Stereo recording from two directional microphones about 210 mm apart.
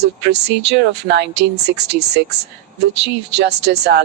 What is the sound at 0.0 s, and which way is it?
Speech, 50° right (ahead or behind).